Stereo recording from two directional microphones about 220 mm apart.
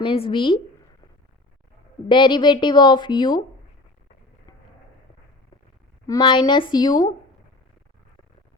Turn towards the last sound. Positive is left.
turn(degrees=15)  # may be behind; listen again after turning